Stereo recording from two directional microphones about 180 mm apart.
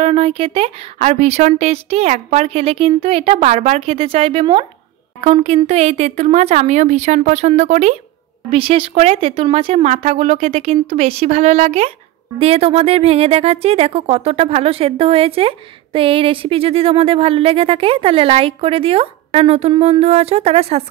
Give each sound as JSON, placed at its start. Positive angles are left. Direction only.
{"t": 0.0, "sound": "a woman's voice", "side_deg": -30}